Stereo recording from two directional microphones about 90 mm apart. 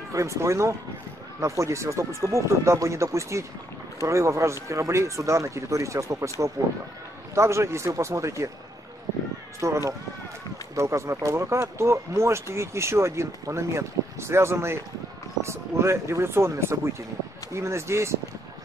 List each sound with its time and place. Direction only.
0.1 s speech: 35° right (ahead or behind)
7.3 s speech: 30° right (ahead or behind)
9.6 s speech: 35° right (ahead or behind)